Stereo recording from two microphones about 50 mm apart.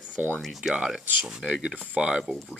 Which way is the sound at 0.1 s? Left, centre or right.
Right.